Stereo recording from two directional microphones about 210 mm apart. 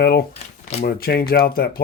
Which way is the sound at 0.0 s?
50° left (ahead or behind).